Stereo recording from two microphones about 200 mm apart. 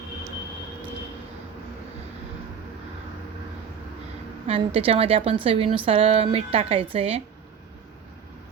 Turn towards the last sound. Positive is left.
turn(degrees=-30)  # may be behind; listen again after turning